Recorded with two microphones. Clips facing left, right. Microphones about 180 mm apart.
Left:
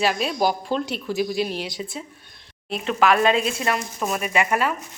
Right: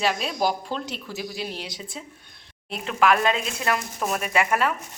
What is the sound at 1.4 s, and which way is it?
Speech, 70° left (ahead or behind).